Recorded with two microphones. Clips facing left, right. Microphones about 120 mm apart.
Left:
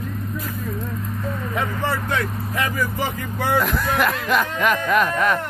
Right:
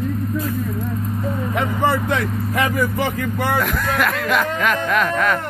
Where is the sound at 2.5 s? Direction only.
65° right (ahead or behind).